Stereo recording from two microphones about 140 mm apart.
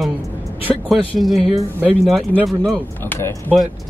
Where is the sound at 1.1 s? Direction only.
Centre (ahead or behind).